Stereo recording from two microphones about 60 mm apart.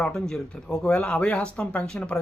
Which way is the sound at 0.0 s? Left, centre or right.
Centre.